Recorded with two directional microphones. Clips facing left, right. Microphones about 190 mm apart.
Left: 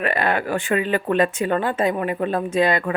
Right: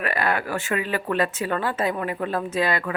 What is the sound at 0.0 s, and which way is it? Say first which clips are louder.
Speech: left 3 dB; 25° left (ahead or behind).